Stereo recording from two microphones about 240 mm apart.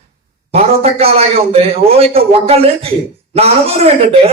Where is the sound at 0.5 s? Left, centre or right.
Right.